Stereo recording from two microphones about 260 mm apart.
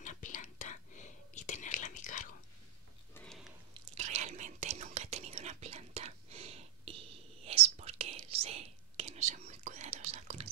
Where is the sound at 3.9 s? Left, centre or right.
Right.